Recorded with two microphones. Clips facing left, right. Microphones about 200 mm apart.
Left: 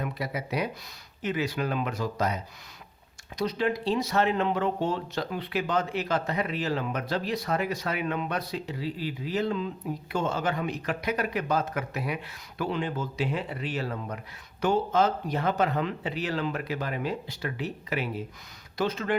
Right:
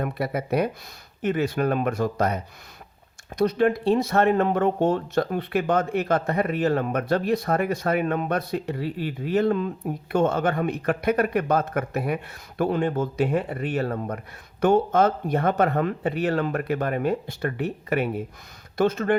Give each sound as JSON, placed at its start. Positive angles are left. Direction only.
{"t": 0.0, "sound": "speech", "side_deg": -55}